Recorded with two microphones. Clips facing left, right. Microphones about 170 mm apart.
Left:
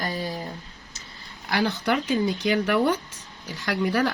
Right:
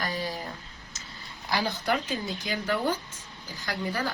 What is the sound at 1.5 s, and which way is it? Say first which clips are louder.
Speech: left 4 dB; 65° left (ahead or behind).